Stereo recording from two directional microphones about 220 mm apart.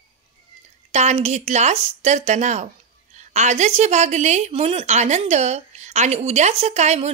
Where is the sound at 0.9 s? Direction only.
30° right (ahead or behind).